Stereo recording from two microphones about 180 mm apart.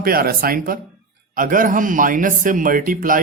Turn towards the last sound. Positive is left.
turn(degrees=-50)  # may be behind; listen again after turning